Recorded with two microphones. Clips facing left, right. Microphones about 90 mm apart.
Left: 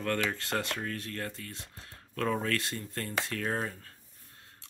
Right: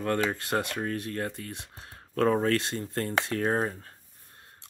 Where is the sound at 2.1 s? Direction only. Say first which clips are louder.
Right 7 dB; 35° right (ahead or behind).